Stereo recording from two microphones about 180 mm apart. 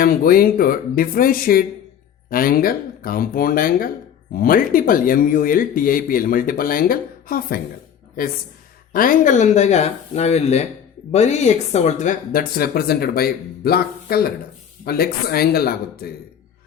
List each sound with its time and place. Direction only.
0.0 s speech: 55° left (ahead or behind)
8.9 s speech: 50° left (ahead or behind)